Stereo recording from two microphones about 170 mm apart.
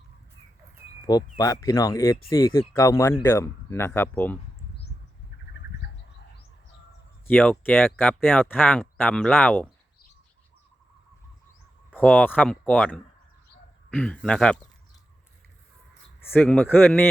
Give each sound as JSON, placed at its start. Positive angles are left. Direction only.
{"t": 1.0, "sound": "speech", "side_deg": 20}
{"t": 7.3, "sound": "speech", "side_deg": 10}
{"t": 11.9, "sound": "speech", "side_deg": 10}
{"t": 16.2, "sound": "speech", "side_deg": 10}